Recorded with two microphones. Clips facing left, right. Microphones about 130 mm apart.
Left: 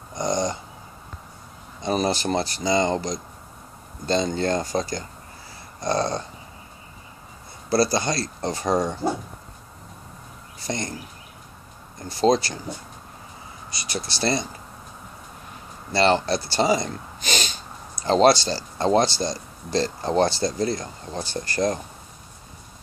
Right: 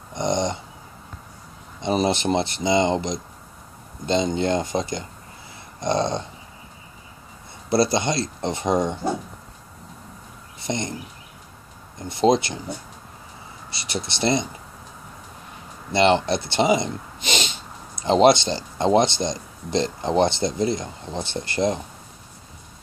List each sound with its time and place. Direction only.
0.1 s dog: 25° right (ahead or behind)
1.8 s speech: 25° right (ahead or behind)
7.7 s speech: 25° right (ahead or behind)
10.6 s speech: 20° right (ahead or behind)
12.0 s speech: 20° right (ahead or behind)
13.7 s speech: 25° right (ahead or behind)
15.9 s speech: 20° right (ahead or behind)